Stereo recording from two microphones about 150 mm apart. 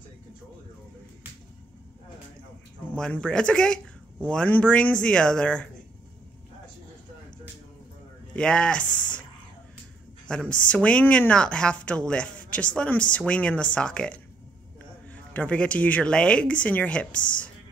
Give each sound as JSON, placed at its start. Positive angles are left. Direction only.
{"t": 2.9, "sound": "speech", "side_deg": 5}
{"t": 8.3, "sound": "speech", "side_deg": 5}
{"t": 10.2, "sound": "speech", "side_deg": 5}